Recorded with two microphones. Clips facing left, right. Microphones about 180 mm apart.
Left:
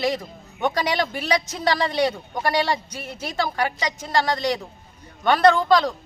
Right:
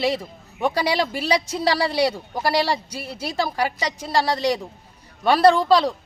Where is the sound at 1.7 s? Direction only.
10° right (ahead or behind).